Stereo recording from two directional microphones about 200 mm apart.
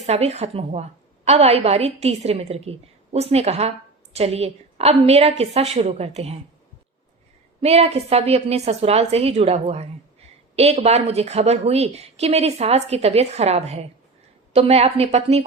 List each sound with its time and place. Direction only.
0.0 s a woman's voice: 30° right (ahead or behind)
7.6 s a woman's voice: 30° right (ahead or behind)